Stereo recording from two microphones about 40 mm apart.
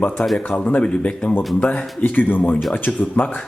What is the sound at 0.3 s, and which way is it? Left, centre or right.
Speech, left.